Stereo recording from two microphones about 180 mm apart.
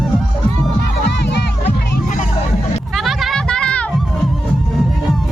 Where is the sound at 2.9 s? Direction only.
Centre (ahead or behind).